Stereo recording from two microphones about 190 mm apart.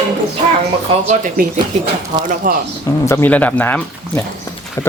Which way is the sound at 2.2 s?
45° right (ahead or behind).